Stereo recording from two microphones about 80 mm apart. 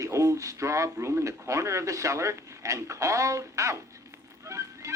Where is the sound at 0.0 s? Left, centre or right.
Right.